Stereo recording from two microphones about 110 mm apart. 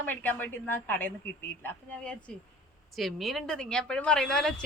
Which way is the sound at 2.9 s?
Centre (ahead or behind).